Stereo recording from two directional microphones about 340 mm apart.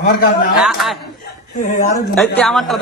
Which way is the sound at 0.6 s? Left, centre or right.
Centre.